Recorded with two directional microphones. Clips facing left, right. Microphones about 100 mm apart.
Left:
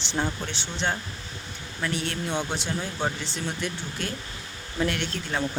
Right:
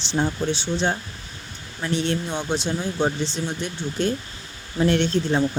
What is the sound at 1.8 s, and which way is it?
Speech, 25° right (ahead or behind).